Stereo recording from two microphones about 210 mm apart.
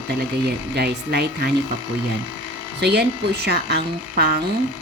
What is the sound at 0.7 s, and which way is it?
Speech, 50° right (ahead or behind).